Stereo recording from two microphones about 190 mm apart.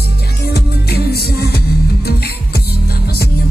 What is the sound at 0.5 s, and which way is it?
Music, 55° left (ahead or behind).